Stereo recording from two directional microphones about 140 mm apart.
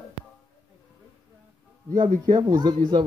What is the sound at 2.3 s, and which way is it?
Speech, 30° right (ahead or behind).